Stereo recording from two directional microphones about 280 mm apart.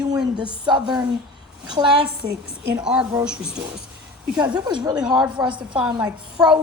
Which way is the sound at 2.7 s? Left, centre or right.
Centre.